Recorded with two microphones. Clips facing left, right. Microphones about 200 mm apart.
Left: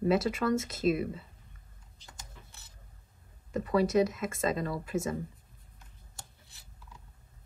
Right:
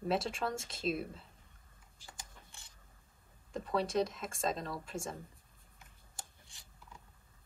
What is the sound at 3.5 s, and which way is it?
Speech, centre (ahead or behind).